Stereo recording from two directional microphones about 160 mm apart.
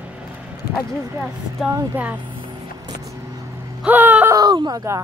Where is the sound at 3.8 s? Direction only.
10° right (ahead or behind).